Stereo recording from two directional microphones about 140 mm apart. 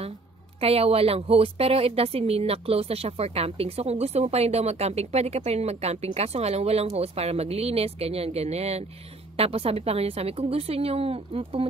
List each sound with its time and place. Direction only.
0.6 s a woman's voice: 45° right (ahead or behind)